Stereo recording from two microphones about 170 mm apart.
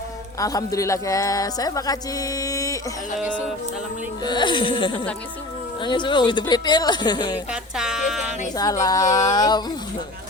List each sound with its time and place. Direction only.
0.3 s speech: 20° left (ahead or behind)
4.2 s speech: 25° left (ahead or behind)
7.5 s music: 5° right (ahead or behind)
8.5 s speech: 20° left (ahead or behind)